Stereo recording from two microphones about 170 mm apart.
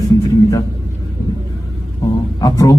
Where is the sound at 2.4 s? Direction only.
20° left (ahead or behind).